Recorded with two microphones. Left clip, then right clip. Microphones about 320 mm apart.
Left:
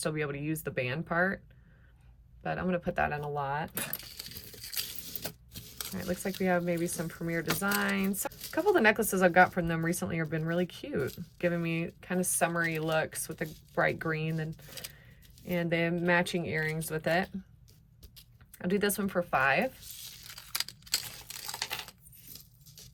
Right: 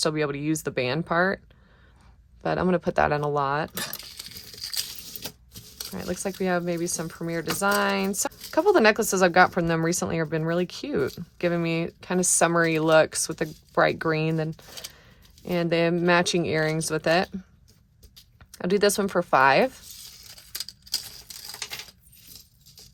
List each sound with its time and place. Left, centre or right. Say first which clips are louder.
0.0 s speech: right 8 dB; centre
2.4 s speech: right 9 dB; centre
18.5 s speech: right 9 dB; centre
20.7 s typewriter: right 3 dB; left